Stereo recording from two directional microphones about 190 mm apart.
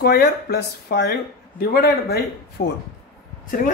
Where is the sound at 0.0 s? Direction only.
55° left (ahead or behind).